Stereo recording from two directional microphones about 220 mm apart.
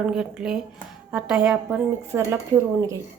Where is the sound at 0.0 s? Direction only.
5° right (ahead or behind).